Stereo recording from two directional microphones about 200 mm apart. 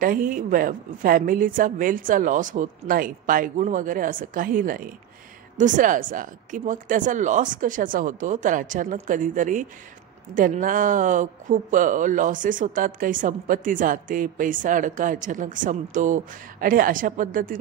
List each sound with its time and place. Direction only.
0.0 s a woman's voice: 45° right (ahead or behind)